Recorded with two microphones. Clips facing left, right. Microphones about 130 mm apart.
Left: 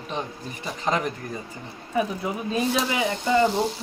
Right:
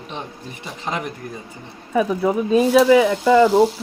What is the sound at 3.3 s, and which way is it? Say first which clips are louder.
Speech: right 6 dB; 90° right.